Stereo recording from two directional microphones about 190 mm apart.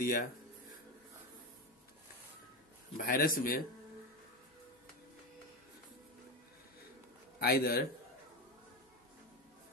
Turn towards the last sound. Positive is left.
turn(degrees=55)  # may be behind; listen again after turning